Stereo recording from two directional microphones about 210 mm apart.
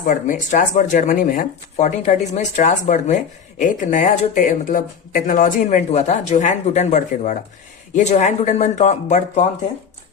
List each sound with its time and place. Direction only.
0.0 s speech: 40° left (ahead or behind)